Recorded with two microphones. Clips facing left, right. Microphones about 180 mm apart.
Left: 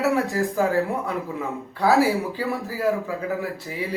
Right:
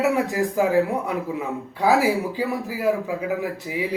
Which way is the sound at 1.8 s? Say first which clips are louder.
Even; 15° right (ahead or behind).